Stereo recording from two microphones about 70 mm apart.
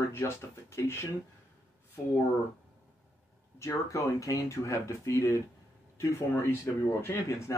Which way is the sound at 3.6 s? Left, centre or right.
Left.